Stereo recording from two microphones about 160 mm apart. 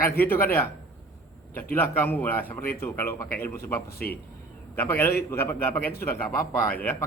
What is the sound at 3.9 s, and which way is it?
Speech, 70° left (ahead or behind).